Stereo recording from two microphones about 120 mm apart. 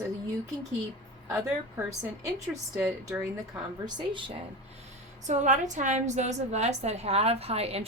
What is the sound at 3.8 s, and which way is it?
Speech, 40° right (ahead or behind).